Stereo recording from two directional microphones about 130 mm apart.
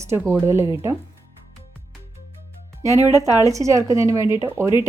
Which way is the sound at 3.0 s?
20° right (ahead or behind).